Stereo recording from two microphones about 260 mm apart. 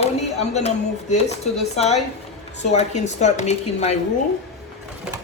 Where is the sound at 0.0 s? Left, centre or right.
Left.